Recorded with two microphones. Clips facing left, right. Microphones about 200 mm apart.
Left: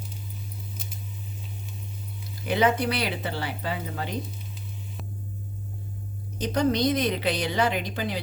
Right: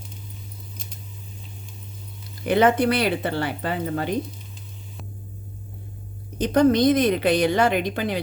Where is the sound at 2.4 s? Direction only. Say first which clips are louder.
Right 5 dB; 55° right (ahead or behind).